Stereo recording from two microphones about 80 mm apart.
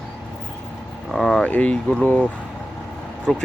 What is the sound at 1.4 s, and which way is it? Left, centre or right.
Speech, centre.